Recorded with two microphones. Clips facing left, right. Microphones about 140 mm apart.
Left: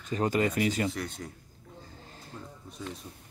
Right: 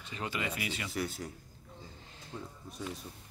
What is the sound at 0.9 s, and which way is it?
Speech, 5° right (ahead or behind).